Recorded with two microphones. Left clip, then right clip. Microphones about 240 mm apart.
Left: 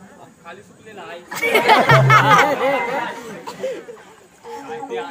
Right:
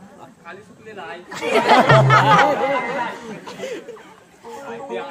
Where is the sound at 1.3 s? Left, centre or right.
Left.